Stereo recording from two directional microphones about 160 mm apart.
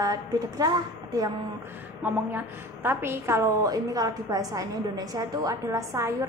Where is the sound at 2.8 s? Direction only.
15° right (ahead or behind).